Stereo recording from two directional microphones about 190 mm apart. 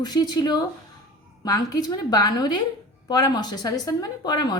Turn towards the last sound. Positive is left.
turn(degrees=20)  # may be behind; listen again after turning